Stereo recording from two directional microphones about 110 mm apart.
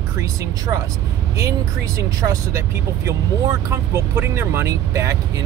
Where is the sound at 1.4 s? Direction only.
30° right (ahead or behind).